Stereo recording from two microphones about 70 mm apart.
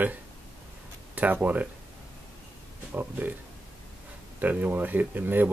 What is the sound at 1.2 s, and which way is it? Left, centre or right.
Speech, right.